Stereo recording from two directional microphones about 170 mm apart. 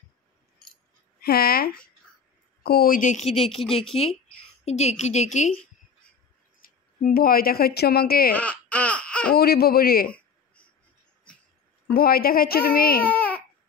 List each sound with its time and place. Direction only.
1.2 s a woman's voice: 65° left (ahead or behind); by 3.4 s 40° left (ahead or behind)
3.4 s a woman's voice: centre (ahead or behind)
3.9 s a woman's voice: 35° left (ahead or behind)
6.6 s speech: 55° left (ahead or behind)
8.4 s baby cry: 10° left (ahead or behind)
9.3 s a woman's voice: 65° left (ahead or behind)
10.0 s a sound: 10° left (ahead or behind)
11.9 s a woman's voice: 60° left (ahead or behind)
13.0 s baby cry: 10° left (ahead or behind)